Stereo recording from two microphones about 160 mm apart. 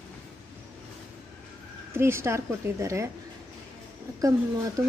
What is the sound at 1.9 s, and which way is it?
A woman's voice, 15° right (ahead or behind).